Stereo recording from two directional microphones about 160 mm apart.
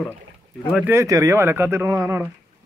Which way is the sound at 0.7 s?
15° right (ahead or behind).